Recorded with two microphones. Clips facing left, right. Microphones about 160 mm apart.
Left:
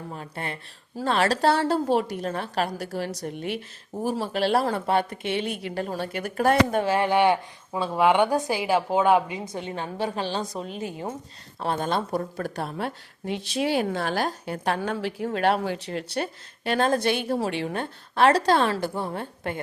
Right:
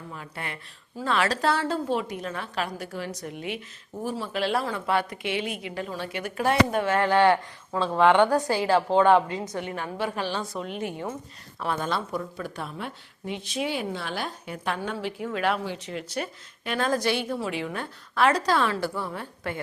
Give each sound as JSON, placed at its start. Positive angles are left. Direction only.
{"t": 0.1, "sound": "speech", "side_deg": 35}
{"t": 6.9, "sound": "a woman's voice", "side_deg": 15}
{"t": 9.6, "sound": "a woman's voice", "side_deg": 25}
{"t": 10.4, "sound": "speech", "side_deg": 40}
{"t": 17.2, "sound": "a woman's voice", "side_deg": 40}